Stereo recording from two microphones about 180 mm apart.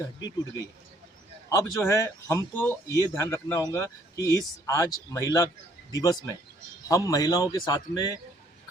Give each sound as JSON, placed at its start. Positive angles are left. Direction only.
{"t": 1.5, "sound": "a man's voice", "side_deg": 20}